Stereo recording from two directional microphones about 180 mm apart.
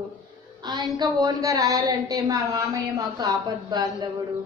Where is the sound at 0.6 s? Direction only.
25° right (ahead or behind).